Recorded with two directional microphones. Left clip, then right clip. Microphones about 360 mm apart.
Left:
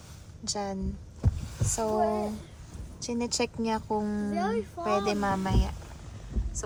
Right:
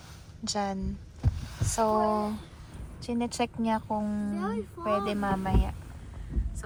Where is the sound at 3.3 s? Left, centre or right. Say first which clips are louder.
Even; centre.